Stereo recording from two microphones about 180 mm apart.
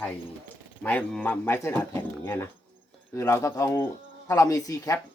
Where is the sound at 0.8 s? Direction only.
10° left (ahead or behind).